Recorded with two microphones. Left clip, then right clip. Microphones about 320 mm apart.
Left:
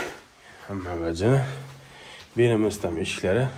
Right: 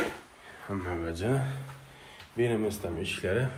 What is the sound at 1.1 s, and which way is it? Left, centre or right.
Speech, left.